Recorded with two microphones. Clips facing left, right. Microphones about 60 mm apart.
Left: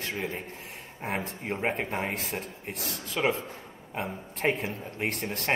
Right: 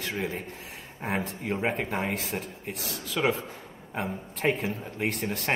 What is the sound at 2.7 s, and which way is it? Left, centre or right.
Speech, left.